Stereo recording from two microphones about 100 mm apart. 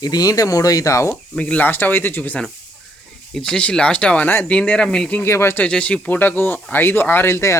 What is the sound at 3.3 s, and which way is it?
Speech, 5° left (ahead or behind).